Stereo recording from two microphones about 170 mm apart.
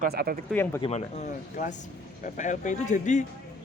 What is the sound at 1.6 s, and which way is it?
A man's voice, 45° left (ahead or behind).